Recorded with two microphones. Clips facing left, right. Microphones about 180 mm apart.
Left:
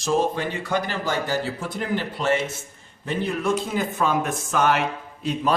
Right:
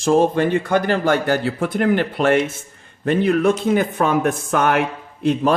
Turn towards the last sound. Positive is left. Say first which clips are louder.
# right 6 dB
turn(degrees=-50)  # may be behind; listen again after turning